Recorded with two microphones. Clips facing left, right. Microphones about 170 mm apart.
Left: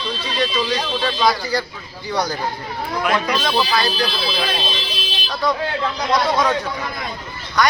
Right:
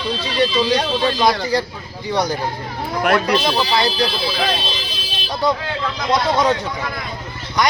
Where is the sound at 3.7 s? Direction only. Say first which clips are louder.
Right 2 dB; 20° right (ahead or behind).